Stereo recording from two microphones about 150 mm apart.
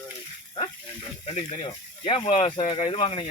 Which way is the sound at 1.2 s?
40° left (ahead or behind).